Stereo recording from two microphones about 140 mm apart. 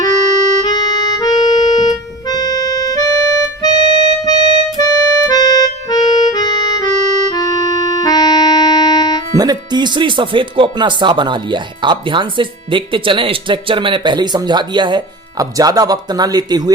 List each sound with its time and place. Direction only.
0.6 s music: 30° left (ahead or behind)
5.9 s accordion: 30° left (ahead or behind)
9.3 s speech: 30° right (ahead or behind)